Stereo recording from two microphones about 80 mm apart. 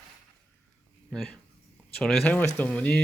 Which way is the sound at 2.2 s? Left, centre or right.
Centre.